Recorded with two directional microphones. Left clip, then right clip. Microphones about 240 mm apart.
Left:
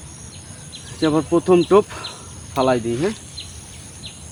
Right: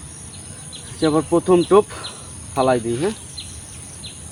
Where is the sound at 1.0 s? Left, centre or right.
Left.